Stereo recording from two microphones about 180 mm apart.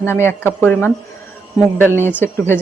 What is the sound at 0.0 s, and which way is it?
Speech, 15° left (ahead or behind).